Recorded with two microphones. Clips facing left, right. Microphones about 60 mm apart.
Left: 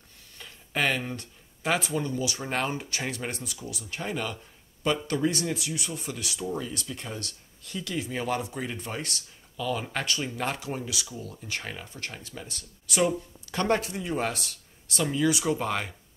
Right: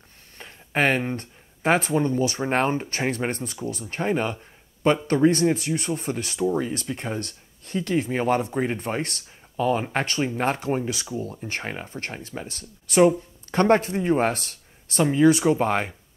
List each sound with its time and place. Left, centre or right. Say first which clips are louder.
0.4 s speech: right 5 dB; right